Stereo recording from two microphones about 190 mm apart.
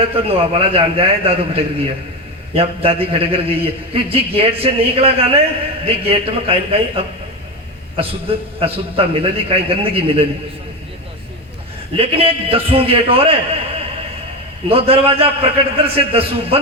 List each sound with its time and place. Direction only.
0.1 s a man's voice: 30° right (ahead or behind)
11.9 s a man's voice: 30° right (ahead or behind)
14.7 s a man's voice: 30° right (ahead or behind)